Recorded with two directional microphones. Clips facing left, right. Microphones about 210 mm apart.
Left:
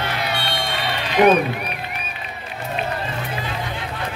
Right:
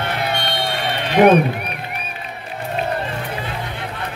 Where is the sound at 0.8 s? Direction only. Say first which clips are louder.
Right 3 dB; 55° right (ahead or behind).